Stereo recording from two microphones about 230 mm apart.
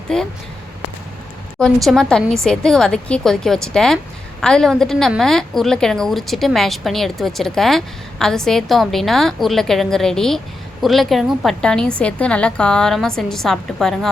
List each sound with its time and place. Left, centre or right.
0.1 s a woman's voice: centre
1.5 s a woman's voice: centre